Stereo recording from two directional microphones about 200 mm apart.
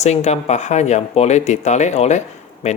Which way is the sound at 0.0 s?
35° left (ahead or behind).